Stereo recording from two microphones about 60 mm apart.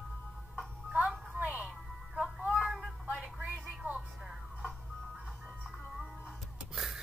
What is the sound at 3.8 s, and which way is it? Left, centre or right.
Music, right.